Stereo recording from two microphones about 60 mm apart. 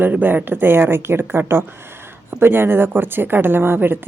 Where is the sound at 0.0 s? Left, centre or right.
Right.